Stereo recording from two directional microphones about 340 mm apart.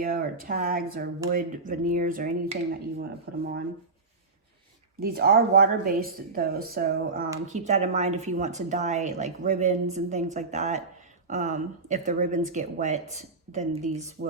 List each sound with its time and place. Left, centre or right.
0.0 s speech: right
4.9 s speech: right